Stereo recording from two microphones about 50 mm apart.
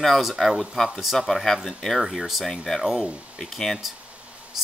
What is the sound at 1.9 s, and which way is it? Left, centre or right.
Speech, centre.